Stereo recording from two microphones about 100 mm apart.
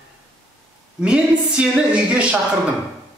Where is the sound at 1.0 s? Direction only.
10° right (ahead or behind).